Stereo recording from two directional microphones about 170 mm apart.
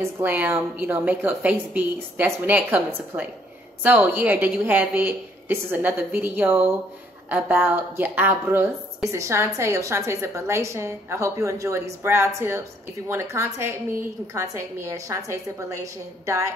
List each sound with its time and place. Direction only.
0.0 s a woman's voice: 10° right (ahead or behind)